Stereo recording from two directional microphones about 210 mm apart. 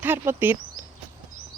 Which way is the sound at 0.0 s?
10° right (ahead or behind).